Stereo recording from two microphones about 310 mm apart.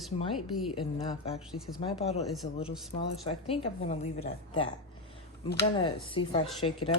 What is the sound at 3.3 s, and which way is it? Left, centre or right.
A woman's voice, centre.